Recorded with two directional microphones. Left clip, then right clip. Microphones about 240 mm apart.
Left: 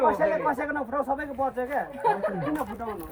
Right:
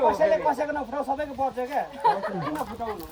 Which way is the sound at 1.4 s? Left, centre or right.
Right.